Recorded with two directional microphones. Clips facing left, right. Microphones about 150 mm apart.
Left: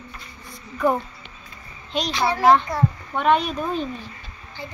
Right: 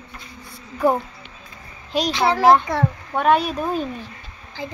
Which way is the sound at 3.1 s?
5° right (ahead or behind).